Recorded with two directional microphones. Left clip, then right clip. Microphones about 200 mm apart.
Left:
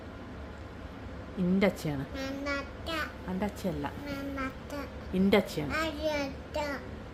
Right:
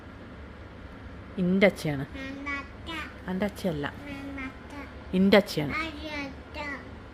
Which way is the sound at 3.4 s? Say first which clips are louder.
Right 4 dB; 35° right (ahead or behind).